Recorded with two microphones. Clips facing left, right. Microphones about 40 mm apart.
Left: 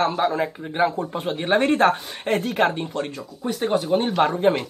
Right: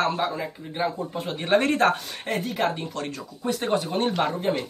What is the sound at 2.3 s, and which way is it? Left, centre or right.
Speech, left.